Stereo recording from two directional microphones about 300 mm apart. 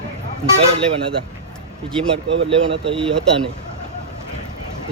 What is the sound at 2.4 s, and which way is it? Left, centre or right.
Speech, centre.